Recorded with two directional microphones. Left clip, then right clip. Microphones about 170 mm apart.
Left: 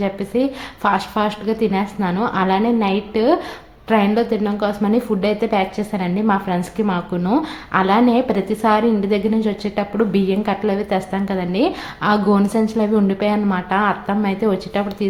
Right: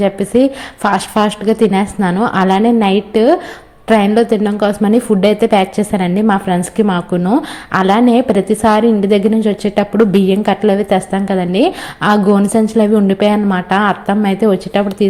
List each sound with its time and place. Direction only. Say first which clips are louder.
0.0 s a woman's voice: right 8 dB; 35° right (ahead or behind)
7.7 s a woman's voice: right 4 dB; 35° right (ahead or behind)